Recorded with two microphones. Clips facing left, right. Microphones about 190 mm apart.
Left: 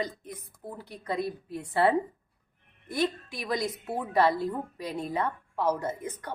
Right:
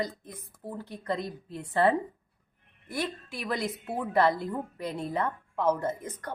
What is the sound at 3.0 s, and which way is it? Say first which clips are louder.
Speech: left 4 dB; 15° left (ahead or behind).